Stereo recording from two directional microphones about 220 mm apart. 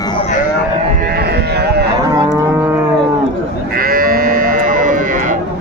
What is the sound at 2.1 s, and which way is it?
Livestock, 10° right (ahead or behind).